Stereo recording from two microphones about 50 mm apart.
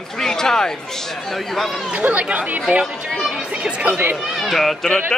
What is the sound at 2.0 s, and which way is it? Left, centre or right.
Speech, right.